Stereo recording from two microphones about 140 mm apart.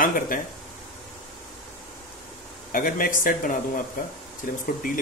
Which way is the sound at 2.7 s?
85° left.